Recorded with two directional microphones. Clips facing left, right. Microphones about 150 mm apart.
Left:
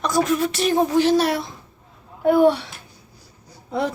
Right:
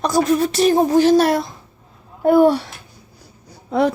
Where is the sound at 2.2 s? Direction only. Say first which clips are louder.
Right 3 dB; 40° right (ahead or behind).